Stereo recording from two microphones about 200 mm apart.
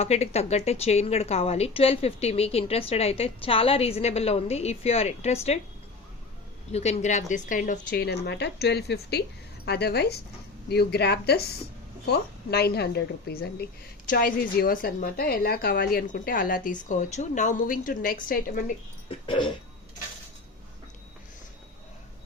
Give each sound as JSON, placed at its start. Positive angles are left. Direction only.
{"t": 0.0, "sound": "a woman's voice", "side_deg": 30}
{"t": 6.7, "sound": "a woman's voice", "side_deg": 35}
{"t": 19.0, "sound": "dog", "side_deg": 25}